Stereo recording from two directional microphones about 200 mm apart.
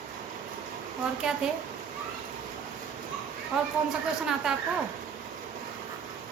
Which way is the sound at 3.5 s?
Centre (ahead or behind).